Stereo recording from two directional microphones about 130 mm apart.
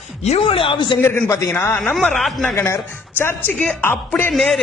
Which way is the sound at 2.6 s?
20° left (ahead or behind).